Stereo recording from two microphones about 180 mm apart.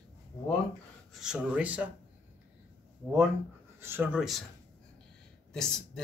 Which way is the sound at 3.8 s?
10° right (ahead or behind).